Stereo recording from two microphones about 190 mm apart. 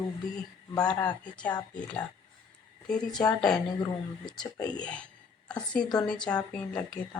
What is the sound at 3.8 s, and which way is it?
Speech, 20° left (ahead or behind).